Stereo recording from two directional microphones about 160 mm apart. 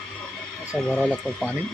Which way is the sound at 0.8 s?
5° left (ahead or behind).